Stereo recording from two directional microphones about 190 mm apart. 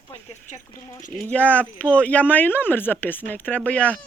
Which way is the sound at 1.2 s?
10° left (ahead or behind).